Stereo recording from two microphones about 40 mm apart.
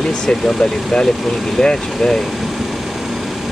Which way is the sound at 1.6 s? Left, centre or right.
Centre.